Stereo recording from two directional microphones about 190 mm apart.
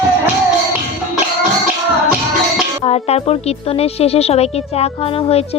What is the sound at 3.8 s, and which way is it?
A woman's voice, 30° left (ahead or behind).